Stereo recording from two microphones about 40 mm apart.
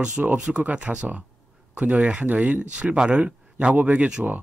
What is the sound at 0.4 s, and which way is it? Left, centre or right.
Speech, right.